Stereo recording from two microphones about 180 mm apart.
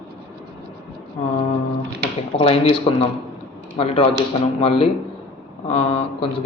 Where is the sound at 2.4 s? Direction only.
30° left (ahead or behind).